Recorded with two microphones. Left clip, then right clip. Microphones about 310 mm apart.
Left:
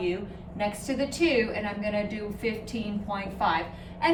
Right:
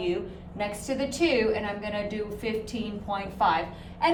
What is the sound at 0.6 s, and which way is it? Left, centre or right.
A woman's voice, centre.